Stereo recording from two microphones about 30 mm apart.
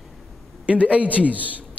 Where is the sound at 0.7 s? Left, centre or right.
Right.